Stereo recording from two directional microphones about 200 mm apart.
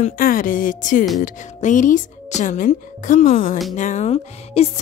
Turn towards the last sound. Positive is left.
turn(degrees=30)  # may be behind; listen again after turning